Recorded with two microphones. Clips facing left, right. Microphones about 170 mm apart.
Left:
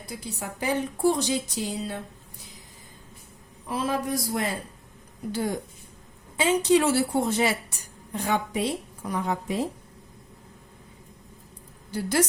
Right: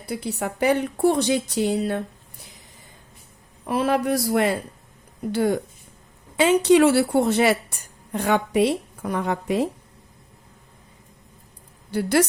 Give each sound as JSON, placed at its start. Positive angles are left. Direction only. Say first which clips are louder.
{"t": 0.0, "sound": "a woman's voice", "louder": "right 8 dB", "side_deg": -65}
{"t": 3.7, "sound": "a woman's voice", "louder": "right 6 dB", "side_deg": -65}
{"t": 11.9, "sound": "a woman's voice", "louder": "right 5 dB", "side_deg": -65}